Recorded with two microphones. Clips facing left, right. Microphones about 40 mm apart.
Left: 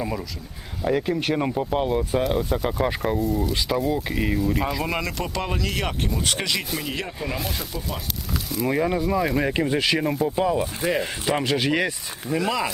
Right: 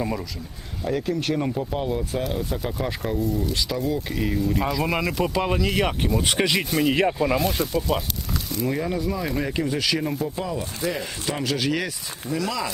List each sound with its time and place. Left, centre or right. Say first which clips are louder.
0.9 s speech: left 2 dB; centre
2.4 s speech: left 4 dB; centre
6.7 s speech: right 8 dB; centre
8.8 s speech: left 4 dB; centre